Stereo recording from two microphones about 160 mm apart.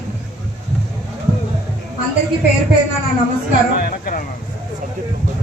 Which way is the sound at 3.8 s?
65° left (ahead or behind).